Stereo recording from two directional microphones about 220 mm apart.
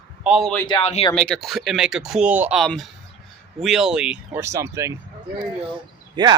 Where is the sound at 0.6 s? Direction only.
25° left (ahead or behind).